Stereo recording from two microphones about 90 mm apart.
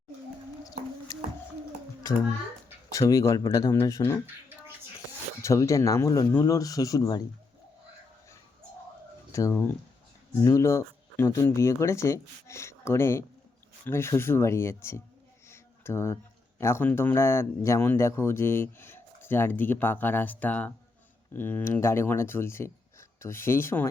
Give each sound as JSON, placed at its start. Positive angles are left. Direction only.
{"t": 2.9, "sound": "speech", "side_deg": 40}
{"t": 5.4, "sound": "speech", "side_deg": 35}
{"t": 9.3, "sound": "speech", "side_deg": 30}
{"t": 15.4, "sound": "a sound", "side_deg": 30}
{"t": 16.6, "sound": "speech", "side_deg": 30}